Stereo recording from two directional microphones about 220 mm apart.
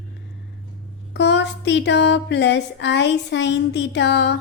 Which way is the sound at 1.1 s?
50° left (ahead or behind).